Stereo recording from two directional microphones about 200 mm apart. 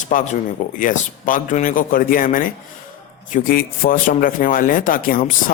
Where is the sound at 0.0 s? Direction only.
40° left (ahead or behind).